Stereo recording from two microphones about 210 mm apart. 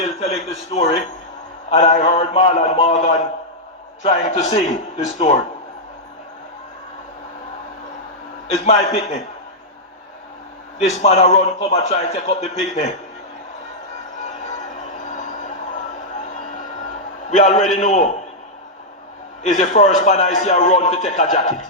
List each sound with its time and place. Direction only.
0.0 s a man's voice: 30° left (ahead or behind)
8.4 s a man's voice: 30° left (ahead or behind)
10.8 s a man's voice: 30° left (ahead or behind)
15.1 s a sound: 35° left (ahead or behind)
17.3 s a man's voice: 35° left (ahead or behind)
19.4 s a man's voice: 35° left (ahead or behind)